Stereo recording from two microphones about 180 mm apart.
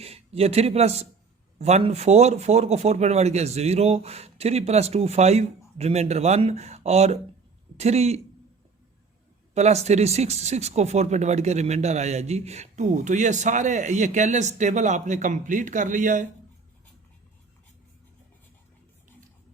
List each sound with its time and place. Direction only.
0.0 s speech: 35° right (ahead or behind)
9.6 s speech: 40° right (ahead or behind)